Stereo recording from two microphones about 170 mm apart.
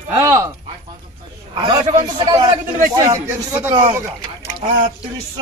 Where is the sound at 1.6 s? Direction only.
30° right (ahead or behind).